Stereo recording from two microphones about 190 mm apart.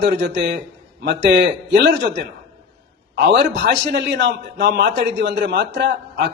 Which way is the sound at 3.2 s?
65° right (ahead or behind).